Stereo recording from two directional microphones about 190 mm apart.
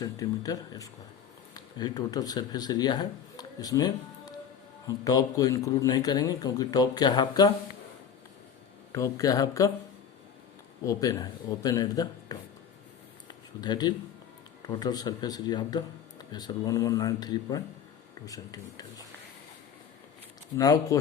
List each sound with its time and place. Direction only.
0.0 s speech: 20° left (ahead or behind)
8.9 s speech: 15° left (ahead or behind)
10.8 s speech: 20° left (ahead or behind)
13.2 s a sound: 20° left (ahead or behind)
14.7 s speech: 20° left (ahead or behind)
20.6 s speech: 20° left (ahead or behind)